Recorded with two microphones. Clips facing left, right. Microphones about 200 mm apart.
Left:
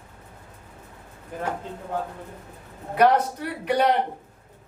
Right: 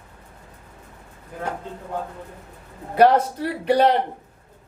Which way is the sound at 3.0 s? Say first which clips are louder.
Right 3 dB; 30° right (ahead or behind).